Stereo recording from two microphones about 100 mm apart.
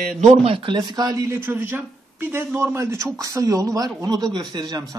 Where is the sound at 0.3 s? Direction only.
65° right (ahead or behind).